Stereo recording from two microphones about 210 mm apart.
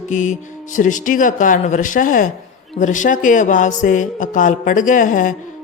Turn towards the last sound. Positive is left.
turn(degrees=40)  # may be behind; listen again after turning